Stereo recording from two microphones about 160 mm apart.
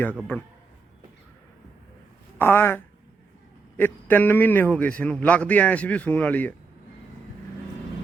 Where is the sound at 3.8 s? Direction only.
10° left (ahead or behind).